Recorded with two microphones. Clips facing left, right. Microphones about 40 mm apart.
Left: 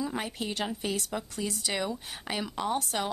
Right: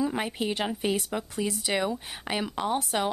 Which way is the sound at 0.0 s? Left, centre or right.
Centre.